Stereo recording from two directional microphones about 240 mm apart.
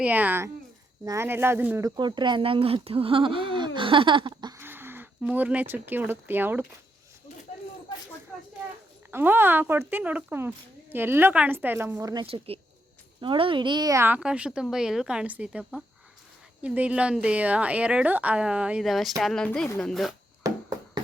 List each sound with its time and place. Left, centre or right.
0.0 s a woman's voice: centre
9.1 s a woman's voice: centre
20.4 s a sound: centre